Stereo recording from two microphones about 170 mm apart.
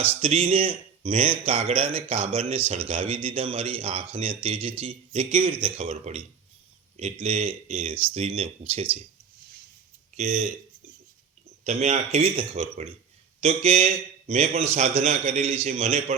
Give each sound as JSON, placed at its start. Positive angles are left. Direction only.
{"t": 0.2, "sound": "a man's voice", "side_deg": -35}
{"t": 10.2, "sound": "a man's voice", "side_deg": -40}
{"t": 11.6, "sound": "a man's voice", "side_deg": -45}